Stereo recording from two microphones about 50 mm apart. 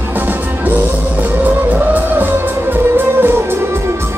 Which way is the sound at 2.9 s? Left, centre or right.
Right.